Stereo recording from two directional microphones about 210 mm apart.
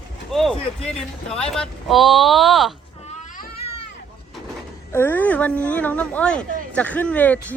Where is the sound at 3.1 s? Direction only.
35° left (ahead or behind).